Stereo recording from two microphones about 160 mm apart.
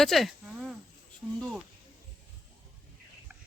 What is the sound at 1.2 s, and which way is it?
Speech, 5° right (ahead or behind).